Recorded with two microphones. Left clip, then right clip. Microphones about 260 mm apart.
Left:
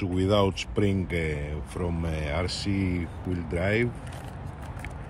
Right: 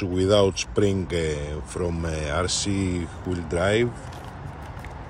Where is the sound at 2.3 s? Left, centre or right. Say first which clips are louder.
Right 5 dB; right.